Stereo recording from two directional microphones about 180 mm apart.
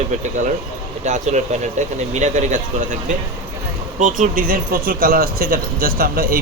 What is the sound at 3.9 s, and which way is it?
Speech, 45° right (ahead or behind).